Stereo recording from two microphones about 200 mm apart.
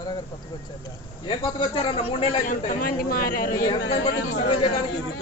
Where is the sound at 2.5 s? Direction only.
45° left (ahead or behind).